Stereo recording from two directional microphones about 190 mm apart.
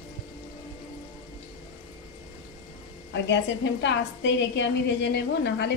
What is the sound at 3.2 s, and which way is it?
A woman's voice, 70° left (ahead or behind).